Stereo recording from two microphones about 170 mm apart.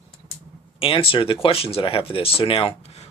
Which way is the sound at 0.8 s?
30° left (ahead or behind).